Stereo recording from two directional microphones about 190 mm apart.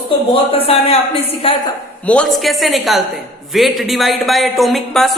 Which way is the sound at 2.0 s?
5° left (ahead or behind).